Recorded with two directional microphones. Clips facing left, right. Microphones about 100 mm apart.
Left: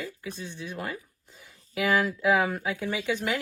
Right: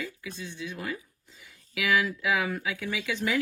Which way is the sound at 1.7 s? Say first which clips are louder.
Left 2 dB; 35° left (ahead or behind).